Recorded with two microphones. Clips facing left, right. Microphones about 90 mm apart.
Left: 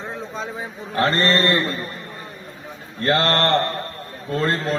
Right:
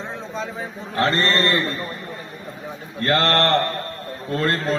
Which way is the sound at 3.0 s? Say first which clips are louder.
Even; 30° left (ahead or behind).